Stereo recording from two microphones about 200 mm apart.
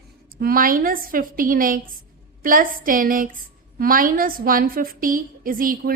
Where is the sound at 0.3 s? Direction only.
45° right (ahead or behind).